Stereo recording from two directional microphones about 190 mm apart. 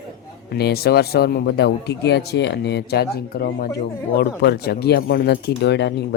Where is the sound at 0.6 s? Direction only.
55° left (ahead or behind).